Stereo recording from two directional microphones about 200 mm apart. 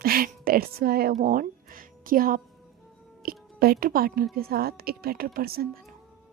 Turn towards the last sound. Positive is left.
turn(degrees=-50)  # may be behind; listen again after turning